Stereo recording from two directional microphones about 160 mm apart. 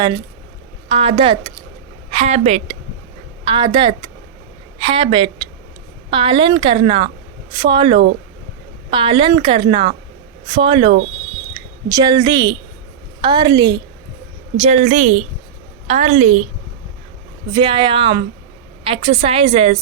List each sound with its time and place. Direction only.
0.9 s a woman's voice: 35° right (ahead or behind)
3.4 s a woman's voice: 30° right (ahead or behind)
14.6 s a woman's voice: 45° right (ahead or behind)
17.5 s speech: 30° right (ahead or behind)